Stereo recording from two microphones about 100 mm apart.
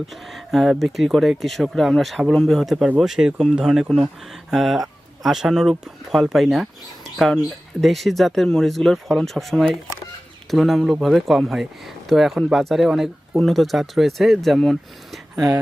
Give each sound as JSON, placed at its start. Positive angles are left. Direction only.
{"t": 0.1, "sound": "speech", "side_deg": 0}
{"t": 15.4, "sound": "speech", "side_deg": -35}